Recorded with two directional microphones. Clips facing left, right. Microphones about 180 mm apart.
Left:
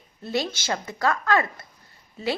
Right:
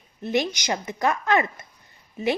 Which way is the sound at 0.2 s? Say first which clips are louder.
Right 3 dB; 20° right (ahead or behind).